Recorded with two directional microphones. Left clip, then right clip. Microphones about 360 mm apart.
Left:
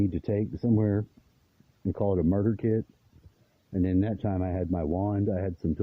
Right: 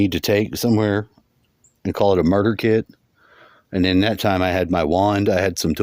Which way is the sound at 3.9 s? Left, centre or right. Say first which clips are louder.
Right 13 dB; centre.